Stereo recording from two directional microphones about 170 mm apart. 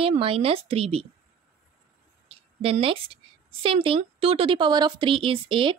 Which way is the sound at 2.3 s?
35° right (ahead or behind).